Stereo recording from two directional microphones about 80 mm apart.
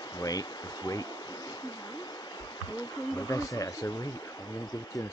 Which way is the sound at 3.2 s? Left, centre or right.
Left.